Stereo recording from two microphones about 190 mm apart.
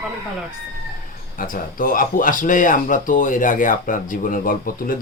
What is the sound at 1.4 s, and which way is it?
Speech, 45° left (ahead or behind).